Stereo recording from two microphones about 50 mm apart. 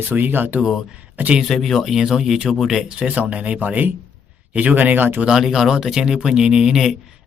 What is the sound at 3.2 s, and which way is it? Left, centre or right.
Speech, right.